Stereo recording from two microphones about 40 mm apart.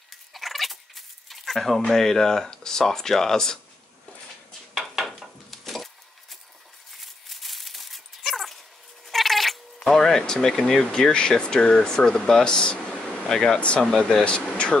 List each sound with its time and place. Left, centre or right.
0.3 s a sound: centre
1.9 s speech: centre
4.7 s dishes: centre
7.0 s a sound: centre
8.3 s dog: centre
9.1 s cat: centre
9.9 s speech: centre; by 13.8 s left
13.9 s speech: centre